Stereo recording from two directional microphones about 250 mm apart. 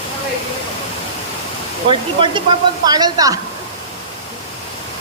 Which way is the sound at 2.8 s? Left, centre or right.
Centre.